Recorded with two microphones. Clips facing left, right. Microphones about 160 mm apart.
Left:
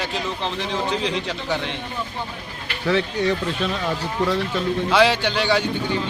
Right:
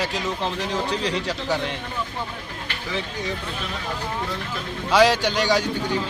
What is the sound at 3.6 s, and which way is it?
Speech, 85° left.